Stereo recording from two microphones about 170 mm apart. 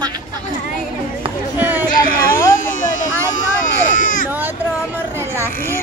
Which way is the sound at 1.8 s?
55° left (ahead or behind).